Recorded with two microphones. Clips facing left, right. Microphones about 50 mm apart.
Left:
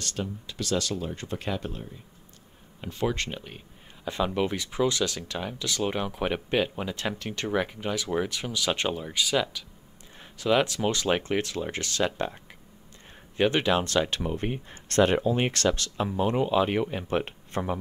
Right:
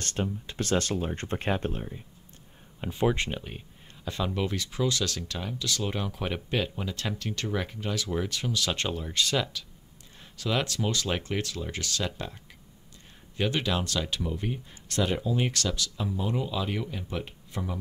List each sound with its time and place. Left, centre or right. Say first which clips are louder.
0.0 s speech: right 2 dB; right
2.8 s speech: right 2 dB; centre
4.0 s speech: left 4 dB; centre
13.4 s speech: left 5 dB; left